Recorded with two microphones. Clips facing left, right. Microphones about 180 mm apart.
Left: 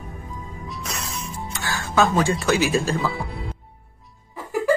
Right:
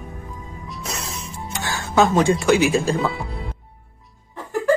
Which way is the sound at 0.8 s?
30° right (ahead or behind).